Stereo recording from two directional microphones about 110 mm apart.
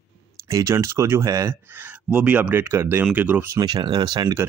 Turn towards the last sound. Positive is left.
turn(degrees=-40)  # may be behind; listen again after turning